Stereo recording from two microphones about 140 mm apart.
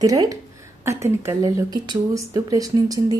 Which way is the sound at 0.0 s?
25° right (ahead or behind).